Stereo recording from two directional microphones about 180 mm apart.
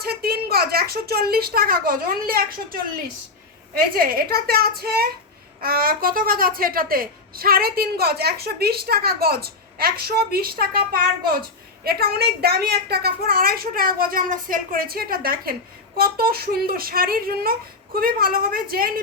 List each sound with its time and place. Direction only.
0.0 s speech: 60° right (ahead or behind)
3.9 s a woman's voice: 55° right (ahead or behind)
11.8 s a woman's voice: 60° right (ahead or behind)